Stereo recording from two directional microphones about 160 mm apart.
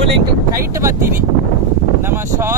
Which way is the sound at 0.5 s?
20° right (ahead or behind).